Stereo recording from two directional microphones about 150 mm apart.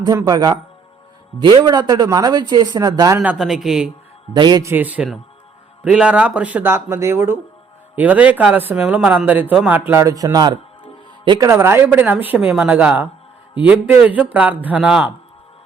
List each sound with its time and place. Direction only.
0.0 s speech: 25° right (ahead or behind)
3.2 s a man's voice: 5° right (ahead or behind)
4.4 s speech: 25° right (ahead or behind)
4.7 s speech: 10° right (ahead or behind)